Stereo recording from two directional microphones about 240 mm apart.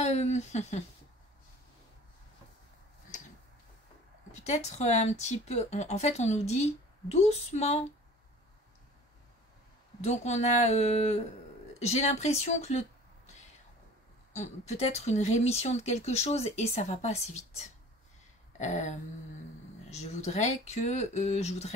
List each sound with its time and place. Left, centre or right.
0.0 s speech: left
4.3 s speech: left
10.0 s speech: left
14.3 s speech: left
18.6 s speech: left